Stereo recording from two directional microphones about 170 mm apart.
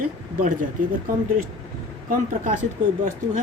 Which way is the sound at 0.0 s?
55° right (ahead or behind).